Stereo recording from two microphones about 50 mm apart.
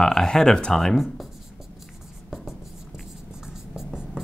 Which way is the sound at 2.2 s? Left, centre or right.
Centre.